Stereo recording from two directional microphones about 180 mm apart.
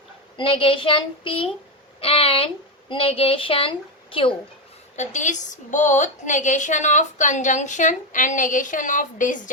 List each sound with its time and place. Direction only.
0.3 s a sound: 30° left (ahead or behind)
2.0 s a child's voice: 30° left (ahead or behind)
4.9 s a woman's voice: 40° left (ahead or behind)